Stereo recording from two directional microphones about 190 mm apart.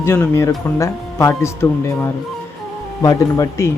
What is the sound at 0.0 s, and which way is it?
Speech, 15° left (ahead or behind).